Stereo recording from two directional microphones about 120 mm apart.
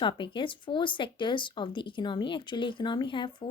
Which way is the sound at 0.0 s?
40° left (ahead or behind).